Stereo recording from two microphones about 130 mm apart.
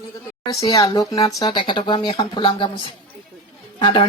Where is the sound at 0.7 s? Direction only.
25° left (ahead or behind).